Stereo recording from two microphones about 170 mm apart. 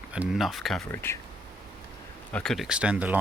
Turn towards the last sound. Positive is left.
turn(degrees=-10)  # may be behind; listen again after turning